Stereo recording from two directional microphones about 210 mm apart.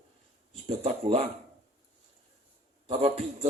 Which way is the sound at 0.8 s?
30° right (ahead or behind).